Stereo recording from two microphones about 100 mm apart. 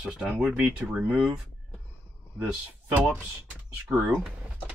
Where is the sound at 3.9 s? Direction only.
15° right (ahead or behind).